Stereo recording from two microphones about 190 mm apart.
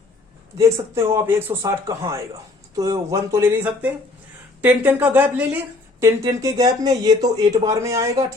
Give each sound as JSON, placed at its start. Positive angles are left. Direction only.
{"t": 0.6, "sound": "speech", "side_deg": -15}